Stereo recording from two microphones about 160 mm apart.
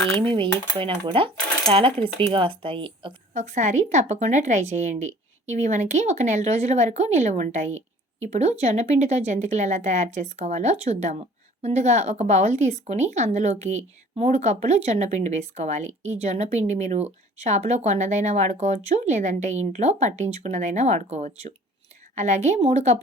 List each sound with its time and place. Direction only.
0.3 s coin: 35° right (ahead or behind)
3.3 s a woman's voice: 50° right (ahead or behind)